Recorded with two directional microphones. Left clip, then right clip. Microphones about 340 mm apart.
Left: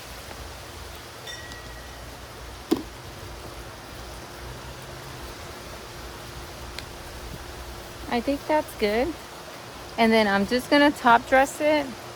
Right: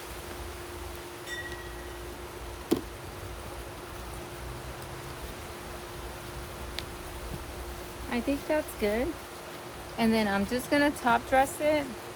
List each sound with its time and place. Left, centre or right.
8.1 s speech: left